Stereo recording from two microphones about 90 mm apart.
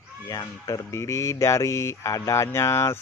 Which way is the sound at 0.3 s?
40° left (ahead or behind).